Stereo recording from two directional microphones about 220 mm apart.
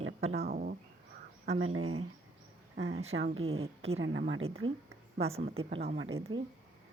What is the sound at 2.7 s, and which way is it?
Speech, 55° right (ahead or behind).